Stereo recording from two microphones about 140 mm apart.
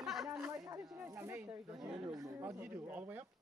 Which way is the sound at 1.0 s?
20° right (ahead or behind).